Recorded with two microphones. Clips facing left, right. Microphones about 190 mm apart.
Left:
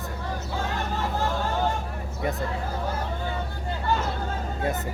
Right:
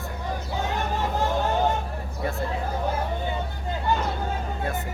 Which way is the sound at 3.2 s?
20° right (ahead or behind).